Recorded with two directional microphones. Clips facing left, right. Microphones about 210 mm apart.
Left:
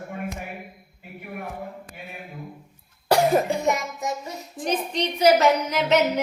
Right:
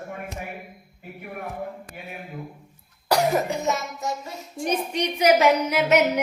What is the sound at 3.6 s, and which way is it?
Child singing, 15° left (ahead or behind).